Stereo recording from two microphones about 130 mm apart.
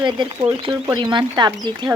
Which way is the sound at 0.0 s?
40° right (ahead or behind).